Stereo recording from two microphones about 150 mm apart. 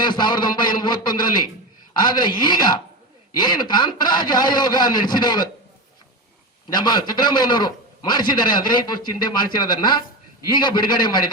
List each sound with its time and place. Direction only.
0.0 s a man's voice: 30° left (ahead or behind)
6.7 s a man's voice: 30° left (ahead or behind)